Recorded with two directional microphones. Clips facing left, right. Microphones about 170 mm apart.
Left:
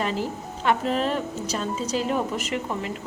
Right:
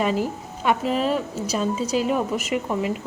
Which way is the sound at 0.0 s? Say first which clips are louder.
Right 4 dB; 10° right (ahead or behind).